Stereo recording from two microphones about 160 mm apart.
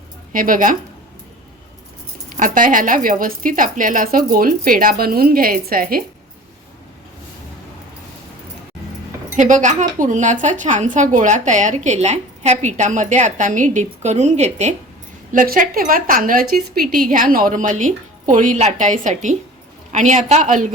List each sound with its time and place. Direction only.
0.3 s a woman's voice: 60° right (ahead or behind)
2.4 s a woman's voice: 55° right (ahead or behind)
9.3 s speech: 50° right (ahead or behind)
15.3 s a woman's voice: 55° right (ahead or behind)